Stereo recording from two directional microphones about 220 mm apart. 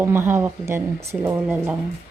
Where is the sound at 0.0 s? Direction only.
10° right (ahead or behind).